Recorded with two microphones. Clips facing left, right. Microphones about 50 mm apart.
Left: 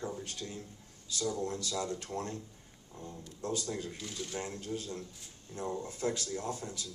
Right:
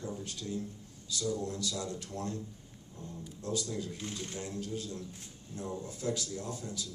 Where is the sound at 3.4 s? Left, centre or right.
Left.